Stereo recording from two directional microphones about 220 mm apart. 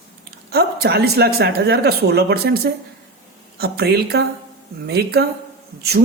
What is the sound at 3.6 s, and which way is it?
A woman's voice, 45° right (ahead or behind).